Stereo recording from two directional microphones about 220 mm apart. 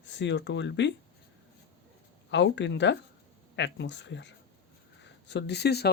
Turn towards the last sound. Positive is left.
turn(degrees=50)  # may be behind; listen again after turning